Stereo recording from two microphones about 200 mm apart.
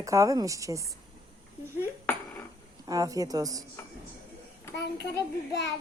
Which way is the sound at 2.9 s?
15° right (ahead or behind).